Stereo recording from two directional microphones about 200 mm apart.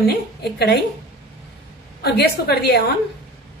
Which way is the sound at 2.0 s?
50° left (ahead or behind).